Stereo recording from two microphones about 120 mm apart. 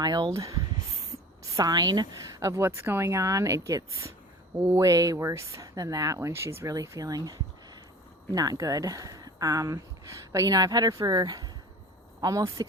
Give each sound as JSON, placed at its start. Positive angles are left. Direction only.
{"t": 0.0, "sound": "speech", "side_deg": -35}
{"t": 1.5, "sound": "speech", "side_deg": -35}
{"t": 6.1, "sound": "speech", "side_deg": -20}